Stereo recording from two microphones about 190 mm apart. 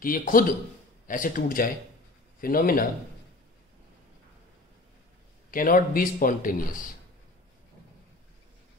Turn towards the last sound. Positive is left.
turn(degrees=45)  # may be behind; listen again after turning